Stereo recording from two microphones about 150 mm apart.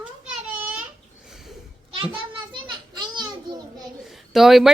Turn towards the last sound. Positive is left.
turn(degrees=0)  # may be behind; listen again after turning